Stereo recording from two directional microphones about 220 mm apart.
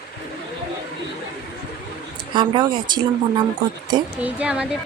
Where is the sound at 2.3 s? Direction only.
20° right (ahead or behind).